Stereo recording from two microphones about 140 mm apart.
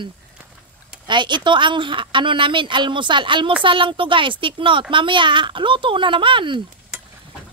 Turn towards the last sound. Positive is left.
turn(degrees=-35)  # may be behind; listen again after turning